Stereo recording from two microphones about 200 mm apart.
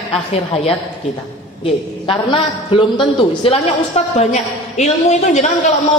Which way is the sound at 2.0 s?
25° left (ahead or behind).